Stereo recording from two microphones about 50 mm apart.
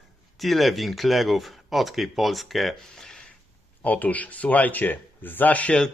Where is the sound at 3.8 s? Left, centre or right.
Left.